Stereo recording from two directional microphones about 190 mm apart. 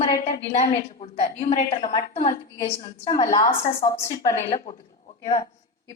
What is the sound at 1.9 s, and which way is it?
Speech, 35° left (ahead or behind).